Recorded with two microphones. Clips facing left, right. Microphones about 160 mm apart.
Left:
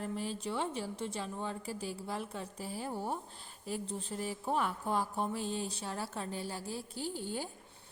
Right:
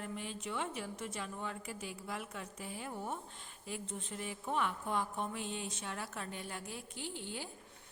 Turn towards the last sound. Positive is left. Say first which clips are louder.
# left 5 dB
turn(degrees=40)  # may be behind; listen again after turning